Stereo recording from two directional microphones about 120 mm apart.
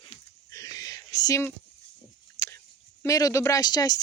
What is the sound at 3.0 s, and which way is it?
Speech, 30° left (ahead or behind).